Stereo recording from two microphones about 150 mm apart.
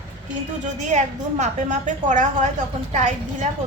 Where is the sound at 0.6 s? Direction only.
55° right (ahead or behind).